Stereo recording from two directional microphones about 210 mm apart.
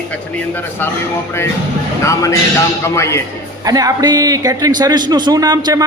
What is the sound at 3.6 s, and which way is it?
A man's voice, 15° right (ahead or behind).